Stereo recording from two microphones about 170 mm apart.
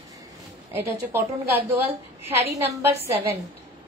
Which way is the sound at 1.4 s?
10° right (ahead or behind).